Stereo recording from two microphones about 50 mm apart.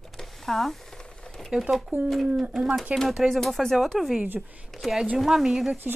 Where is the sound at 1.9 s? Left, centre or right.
Left.